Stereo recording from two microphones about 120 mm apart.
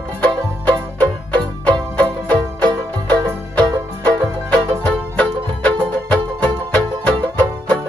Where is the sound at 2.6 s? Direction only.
35° right (ahead or behind).